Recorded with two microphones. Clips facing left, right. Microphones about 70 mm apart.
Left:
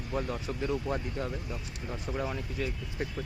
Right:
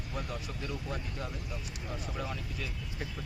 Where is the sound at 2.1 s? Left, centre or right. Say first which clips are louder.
Left 8 dB; left.